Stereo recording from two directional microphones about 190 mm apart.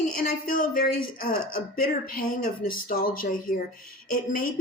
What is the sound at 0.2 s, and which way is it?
A woman's voice, 50° left (ahead or behind).